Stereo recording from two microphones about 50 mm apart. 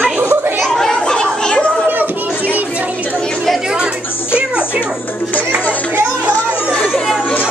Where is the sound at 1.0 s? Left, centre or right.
Centre.